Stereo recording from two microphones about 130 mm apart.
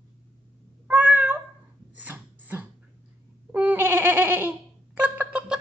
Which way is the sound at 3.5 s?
10° right (ahead or behind).